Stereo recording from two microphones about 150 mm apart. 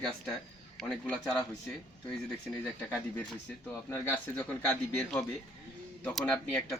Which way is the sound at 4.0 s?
10° left (ahead or behind).